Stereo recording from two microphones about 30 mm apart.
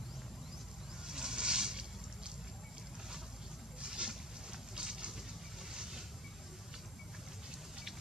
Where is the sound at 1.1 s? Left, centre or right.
Right.